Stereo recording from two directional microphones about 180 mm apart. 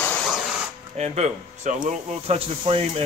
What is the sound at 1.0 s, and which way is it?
Speech, 40° right (ahead or behind).